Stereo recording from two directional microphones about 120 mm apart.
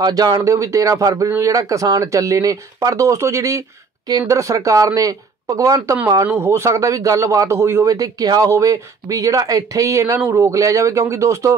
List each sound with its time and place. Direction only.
0.0 s a man's voice: 35° right (ahead or behind)